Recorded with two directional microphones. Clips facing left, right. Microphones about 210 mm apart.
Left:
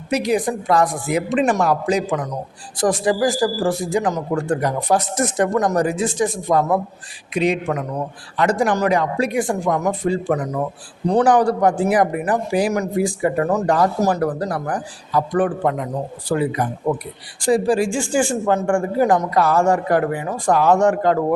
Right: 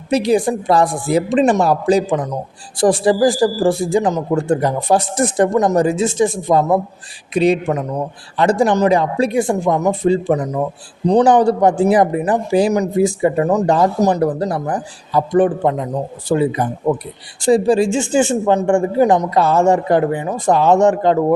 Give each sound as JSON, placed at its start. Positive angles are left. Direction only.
{"t": 0.1, "sound": "a man's voice", "side_deg": -30}